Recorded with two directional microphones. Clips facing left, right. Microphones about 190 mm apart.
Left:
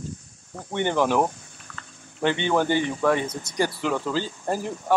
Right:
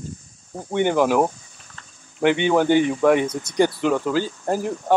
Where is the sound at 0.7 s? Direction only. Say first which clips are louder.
Right 4 dB; 10° right (ahead or behind).